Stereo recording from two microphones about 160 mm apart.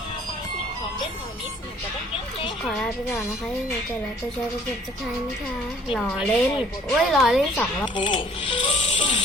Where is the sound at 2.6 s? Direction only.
Centre (ahead or behind).